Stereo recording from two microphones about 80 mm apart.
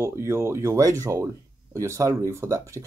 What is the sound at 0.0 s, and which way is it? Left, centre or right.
Speech, right.